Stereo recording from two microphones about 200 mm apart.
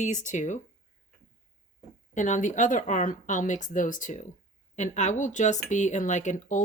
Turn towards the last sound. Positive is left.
turn(degrees=40)  # may be behind; listen again after turning